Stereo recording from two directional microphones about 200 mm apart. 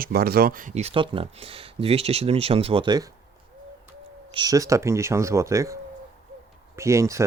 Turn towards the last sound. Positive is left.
turn(degrees=-15)  # may be behind; listen again after turning